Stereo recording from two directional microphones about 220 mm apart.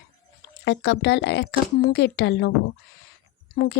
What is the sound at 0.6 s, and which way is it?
Speech, 50° left (ahead or behind).